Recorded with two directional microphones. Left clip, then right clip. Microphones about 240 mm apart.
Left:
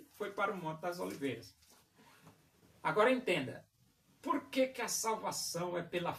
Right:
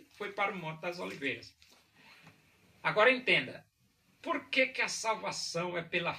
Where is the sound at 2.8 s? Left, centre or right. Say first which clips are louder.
Right 4 dB; centre.